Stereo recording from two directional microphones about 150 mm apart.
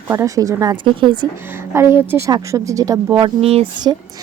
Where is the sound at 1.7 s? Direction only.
15° right (ahead or behind).